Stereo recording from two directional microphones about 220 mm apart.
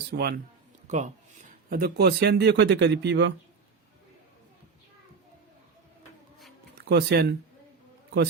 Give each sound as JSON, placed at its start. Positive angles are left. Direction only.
{"t": 0.1, "sound": "speech", "side_deg": -45}
{"t": 0.9, "sound": "speech", "side_deg": -35}
{"t": 6.7, "sound": "speech", "side_deg": -50}